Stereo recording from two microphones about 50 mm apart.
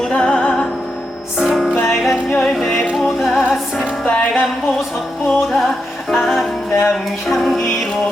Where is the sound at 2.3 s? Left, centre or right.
Centre.